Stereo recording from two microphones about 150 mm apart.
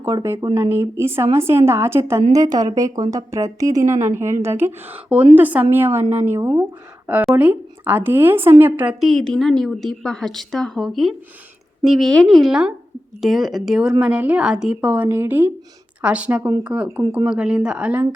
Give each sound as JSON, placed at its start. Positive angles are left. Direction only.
{"t": 0.0, "sound": "a woman's voice", "side_deg": -20}
{"t": 9.0, "sound": "a woman's voice", "side_deg": 0}